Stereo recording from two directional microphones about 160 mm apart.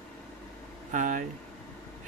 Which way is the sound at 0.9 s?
55° right (ahead or behind).